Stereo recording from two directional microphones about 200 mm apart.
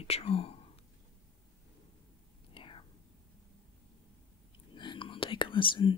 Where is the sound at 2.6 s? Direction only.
25° left (ahead or behind).